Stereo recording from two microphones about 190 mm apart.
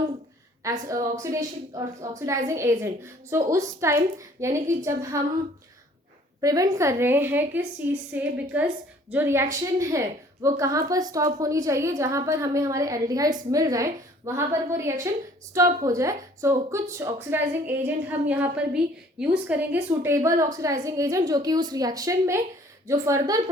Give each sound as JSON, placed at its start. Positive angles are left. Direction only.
{"t": 0.6, "sound": "a woman's voice", "side_deg": -15}
{"t": 6.4, "sound": "a woman's voice", "side_deg": -20}